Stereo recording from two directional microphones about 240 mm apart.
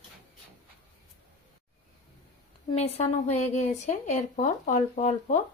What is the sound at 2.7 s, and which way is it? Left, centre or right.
A woman's voice, left.